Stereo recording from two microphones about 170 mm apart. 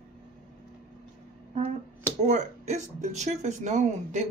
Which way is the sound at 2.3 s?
45° right (ahead or behind).